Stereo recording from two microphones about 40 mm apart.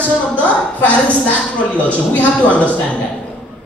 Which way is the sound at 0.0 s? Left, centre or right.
Left.